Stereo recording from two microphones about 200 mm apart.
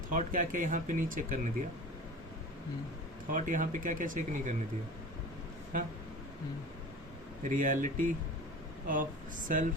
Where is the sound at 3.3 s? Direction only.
40° right (ahead or behind).